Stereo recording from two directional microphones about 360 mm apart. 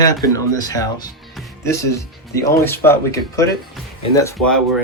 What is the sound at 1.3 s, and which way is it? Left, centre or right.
Music, centre.